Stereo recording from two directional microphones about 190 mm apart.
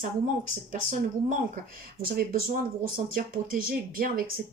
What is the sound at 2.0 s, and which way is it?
A woman's voice, 50° right (ahead or behind).